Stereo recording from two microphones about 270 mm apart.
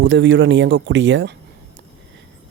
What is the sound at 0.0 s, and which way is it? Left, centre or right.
Speech, right.